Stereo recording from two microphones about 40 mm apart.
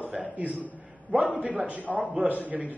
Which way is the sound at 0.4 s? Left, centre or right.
Right.